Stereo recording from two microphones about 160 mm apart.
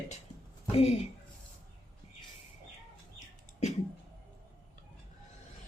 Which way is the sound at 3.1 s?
45° left (ahead or behind).